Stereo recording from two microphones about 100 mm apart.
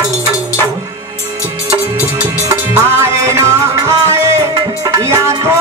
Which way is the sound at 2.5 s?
30° right (ahead or behind).